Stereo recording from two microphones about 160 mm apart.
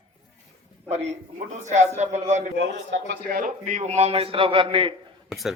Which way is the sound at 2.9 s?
90° right.